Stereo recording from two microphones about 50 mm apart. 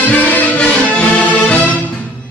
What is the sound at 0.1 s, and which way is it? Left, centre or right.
Music, left.